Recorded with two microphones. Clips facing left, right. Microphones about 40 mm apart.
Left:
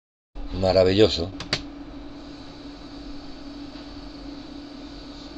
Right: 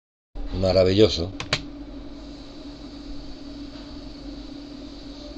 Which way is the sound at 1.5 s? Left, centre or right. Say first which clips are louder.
Right 3 dB; right.